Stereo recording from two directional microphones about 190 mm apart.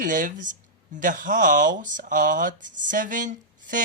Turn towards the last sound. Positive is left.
turn(degrees=-45)  # may be behind; listen again after turning